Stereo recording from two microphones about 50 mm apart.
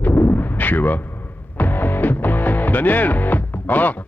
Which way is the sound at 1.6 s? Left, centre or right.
Left.